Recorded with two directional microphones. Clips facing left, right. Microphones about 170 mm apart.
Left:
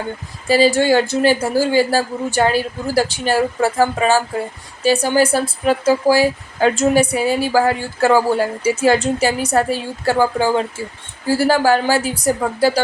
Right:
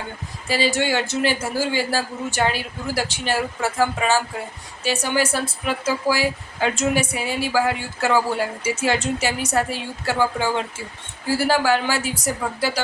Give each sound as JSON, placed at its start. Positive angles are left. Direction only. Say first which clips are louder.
{"t": 0.4, "sound": "speech", "louder": "left 8 dB", "side_deg": 40}